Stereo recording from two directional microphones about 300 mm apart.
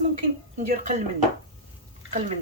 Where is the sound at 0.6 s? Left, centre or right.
Right.